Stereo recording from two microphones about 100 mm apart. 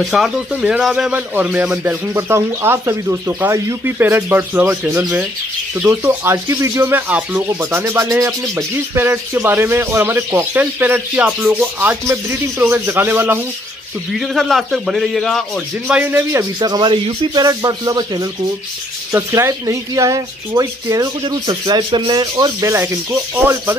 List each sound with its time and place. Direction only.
0.1 s a man's voice: 5° right (ahead or behind)
2.1 s speech: 25° right (ahead or behind)
7.4 s speech: 30° right (ahead or behind)
14.1 s a man's voice: centre (ahead or behind)
15.9 s speech: 15° right (ahead or behind)
16.2 s speech: 30° right (ahead or behind)
16.5 s speech: 45° right (ahead or behind)
19.1 s speech: 25° right (ahead or behind); by 22.2 s 50° right (ahead or behind)
22.6 s speech: 25° right (ahead or behind)